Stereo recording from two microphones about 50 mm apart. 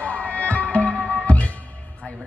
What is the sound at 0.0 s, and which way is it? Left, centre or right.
Music, left.